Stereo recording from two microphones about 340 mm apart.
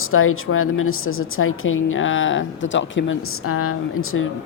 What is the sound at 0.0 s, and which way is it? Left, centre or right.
A woman's voice, left.